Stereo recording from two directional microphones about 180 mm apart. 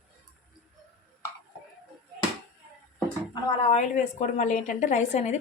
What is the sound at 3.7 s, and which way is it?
Speech, 40° left (ahead or behind).